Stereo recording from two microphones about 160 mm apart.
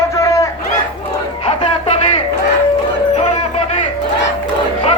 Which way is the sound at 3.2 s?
45° left (ahead or behind).